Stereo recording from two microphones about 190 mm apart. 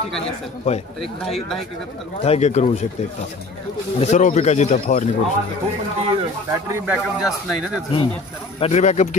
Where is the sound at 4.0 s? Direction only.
40° left (ahead or behind).